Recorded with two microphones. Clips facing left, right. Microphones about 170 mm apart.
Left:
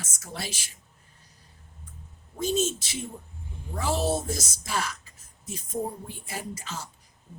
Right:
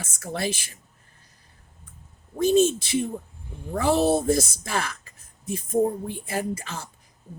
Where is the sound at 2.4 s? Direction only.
55° right (ahead or behind).